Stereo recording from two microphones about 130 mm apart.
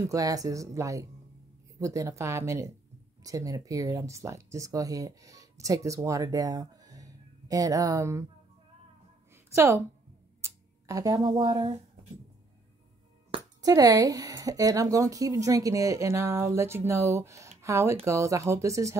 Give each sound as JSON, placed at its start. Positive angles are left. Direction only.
{"t": 0.0, "sound": "a woman's voice", "side_deg": -25}
{"t": 9.3, "sound": "a sound", "side_deg": -20}
{"t": 13.6, "sound": "a woman's voice", "side_deg": -30}